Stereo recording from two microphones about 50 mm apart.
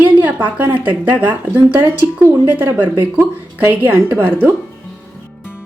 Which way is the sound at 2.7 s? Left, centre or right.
Right.